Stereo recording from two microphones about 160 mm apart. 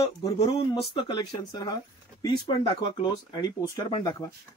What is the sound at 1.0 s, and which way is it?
Speech, 30° left (ahead or behind).